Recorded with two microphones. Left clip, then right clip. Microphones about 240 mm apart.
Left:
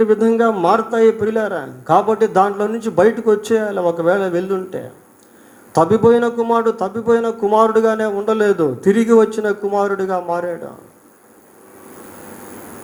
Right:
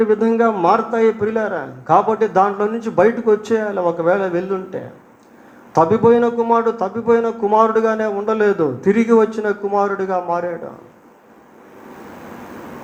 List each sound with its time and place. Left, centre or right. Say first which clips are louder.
0.0 s a man's voice: left 1 dB; left